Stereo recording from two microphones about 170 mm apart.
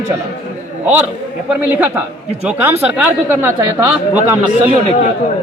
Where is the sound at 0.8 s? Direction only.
10° right (ahead or behind).